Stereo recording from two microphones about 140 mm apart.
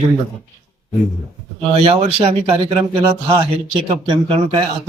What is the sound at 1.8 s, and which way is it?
Speech, 45° right (ahead or behind).